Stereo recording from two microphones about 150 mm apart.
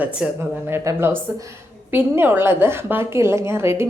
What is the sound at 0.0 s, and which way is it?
A woman's voice, 10° right (ahead or behind).